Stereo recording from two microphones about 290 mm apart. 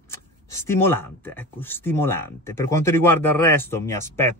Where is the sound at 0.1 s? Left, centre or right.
Centre.